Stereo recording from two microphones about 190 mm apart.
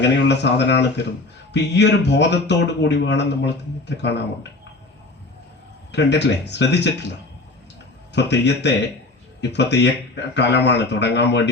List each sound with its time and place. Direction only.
0.0 s a man's voice: 65° left (ahead or behind)
5.9 s a man's voice: 65° left (ahead or behind)
8.1 s a man's voice: 65° left (ahead or behind)